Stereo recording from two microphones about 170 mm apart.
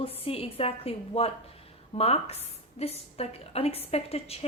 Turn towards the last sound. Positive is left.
turn(degrees=35)  # may be behind; listen again after turning